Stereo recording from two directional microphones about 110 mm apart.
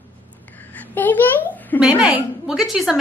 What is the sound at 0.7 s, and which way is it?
A child's voice, 15° left (ahead or behind).